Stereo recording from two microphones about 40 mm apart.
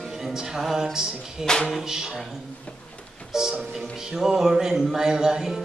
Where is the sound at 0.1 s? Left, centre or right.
Centre.